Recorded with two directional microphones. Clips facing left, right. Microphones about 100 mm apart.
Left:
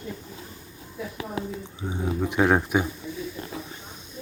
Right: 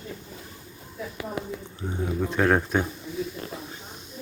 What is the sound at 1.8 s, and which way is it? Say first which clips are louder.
Speech: left 1 dB; 10° left (ahead or behind).